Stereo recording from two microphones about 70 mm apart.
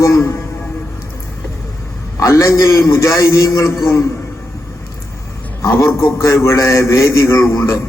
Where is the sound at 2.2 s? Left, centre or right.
Left.